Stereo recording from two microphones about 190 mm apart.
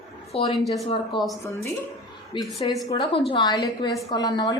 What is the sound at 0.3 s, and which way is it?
Speech, 30° left (ahead or behind).